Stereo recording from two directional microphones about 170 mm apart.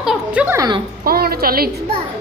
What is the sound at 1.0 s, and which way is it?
Speech, 65° right (ahead or behind).